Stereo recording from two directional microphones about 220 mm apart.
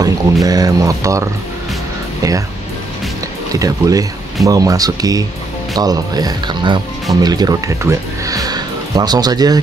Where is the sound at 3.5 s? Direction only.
15° right (ahead or behind).